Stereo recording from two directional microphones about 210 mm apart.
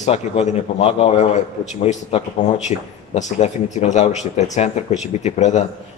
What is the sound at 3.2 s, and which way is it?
Speech, 35° left (ahead or behind).